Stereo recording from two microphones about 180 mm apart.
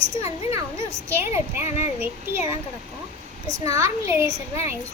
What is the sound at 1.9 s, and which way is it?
Speech, 10° right (ahead or behind).